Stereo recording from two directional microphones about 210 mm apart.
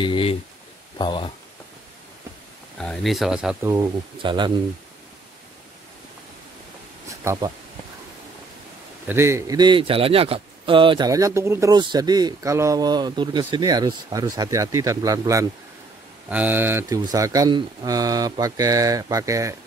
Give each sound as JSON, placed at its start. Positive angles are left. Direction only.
{"t": 0.0, "sound": "a sound", "side_deg": 25}
{"t": 0.9, "sound": "speech", "side_deg": 20}
{"t": 2.8, "sound": "speech", "side_deg": 0}
{"t": 3.7, "sound": "a man's voice", "side_deg": -20}
{"t": 7.1, "sound": "speech", "side_deg": -15}
{"t": 9.0, "sound": "a man's voice", "side_deg": -10}